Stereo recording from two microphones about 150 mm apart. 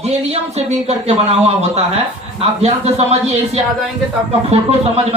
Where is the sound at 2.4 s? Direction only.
45° right (ahead or behind).